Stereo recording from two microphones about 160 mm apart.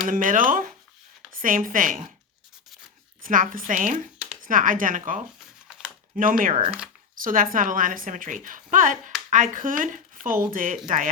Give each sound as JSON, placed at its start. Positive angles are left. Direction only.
{"t": 0.1, "sound": "a woman's voice", "side_deg": -55}
{"t": 3.2, "sound": "a woman's voice", "side_deg": -55}
{"t": 5.6, "sound": "typing", "side_deg": -5}
{"t": 6.1, "sound": "a woman's voice", "side_deg": -60}
{"t": 6.7, "sound": "speech", "side_deg": -5}
{"t": 7.2, "sound": "a woman's voice", "side_deg": -60}